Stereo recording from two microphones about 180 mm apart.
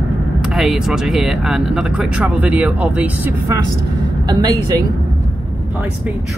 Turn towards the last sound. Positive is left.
turn(degrees=-25)  # may be behind; listen again after turning